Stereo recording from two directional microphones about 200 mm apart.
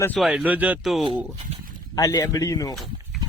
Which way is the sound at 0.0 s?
5° left (ahead or behind).